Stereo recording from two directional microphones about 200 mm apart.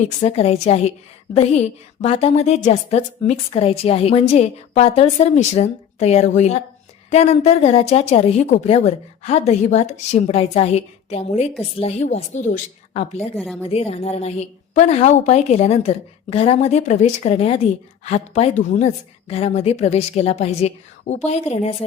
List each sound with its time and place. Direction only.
0.2 s a woman's voice: 30° left (ahead or behind)
13.3 s a woman's voice: centre (ahead or behind)
13.6 s a woman's voice: 30° left (ahead or behind)